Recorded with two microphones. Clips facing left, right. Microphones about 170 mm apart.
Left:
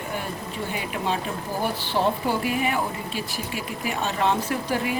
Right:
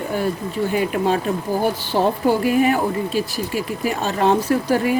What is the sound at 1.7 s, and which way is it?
A woman's voice, 40° right (ahead or behind).